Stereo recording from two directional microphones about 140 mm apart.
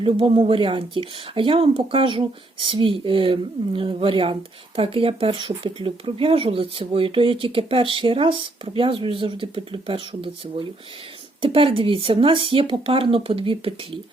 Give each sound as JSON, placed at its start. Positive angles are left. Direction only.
{"t": 0.0, "sound": "speech", "side_deg": -40}